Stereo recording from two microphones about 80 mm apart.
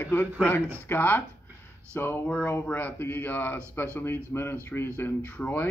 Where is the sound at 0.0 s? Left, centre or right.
Left.